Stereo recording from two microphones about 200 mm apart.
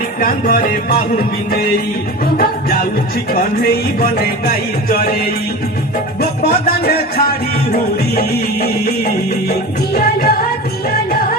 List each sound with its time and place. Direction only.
0.2 s music: 45° left (ahead or behind)